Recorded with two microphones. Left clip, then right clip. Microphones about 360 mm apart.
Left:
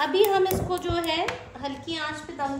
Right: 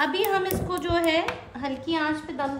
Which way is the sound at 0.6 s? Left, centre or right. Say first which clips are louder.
Right 3 dB; right.